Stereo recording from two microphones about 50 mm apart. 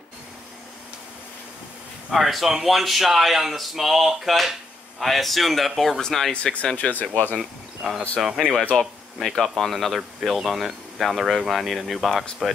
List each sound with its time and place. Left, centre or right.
2.0 s speech: centre
6.4 s speech: left
7.3 s speech: centre
8.7 s speech: centre
9.2 s speech: centre